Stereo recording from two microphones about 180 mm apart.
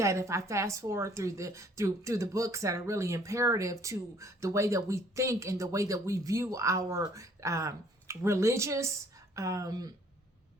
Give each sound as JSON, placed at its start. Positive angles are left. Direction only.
{"t": 0.0, "sound": "a woman's voice", "side_deg": -15}